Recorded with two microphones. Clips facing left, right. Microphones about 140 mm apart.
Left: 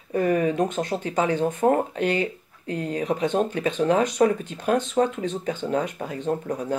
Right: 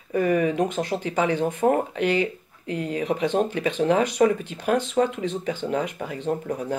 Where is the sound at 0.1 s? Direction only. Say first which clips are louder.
Even; 35° left (ahead or behind).